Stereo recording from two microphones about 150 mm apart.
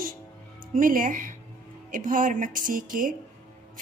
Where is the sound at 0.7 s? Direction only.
65° right (ahead or behind).